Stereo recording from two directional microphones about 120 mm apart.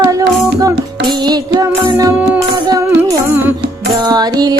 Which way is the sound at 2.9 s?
15° right (ahead or behind).